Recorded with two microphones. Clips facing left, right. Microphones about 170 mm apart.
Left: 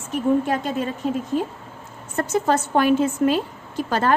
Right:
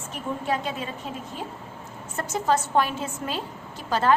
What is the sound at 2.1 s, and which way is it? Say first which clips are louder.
A woman's voice: left 4 dB; 55° left (ahead or behind).